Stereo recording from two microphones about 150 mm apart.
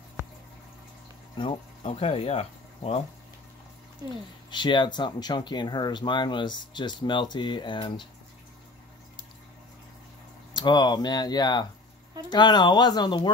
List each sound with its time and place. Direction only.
1.9 s speech: 40° left (ahead or behind)
4.1 s speech: 30° left (ahead or behind)
10.5 s speech: 30° left (ahead or behind)